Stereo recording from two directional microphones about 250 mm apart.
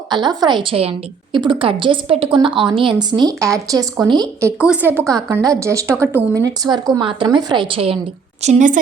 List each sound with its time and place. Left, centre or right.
0.1 s a woman's voice: centre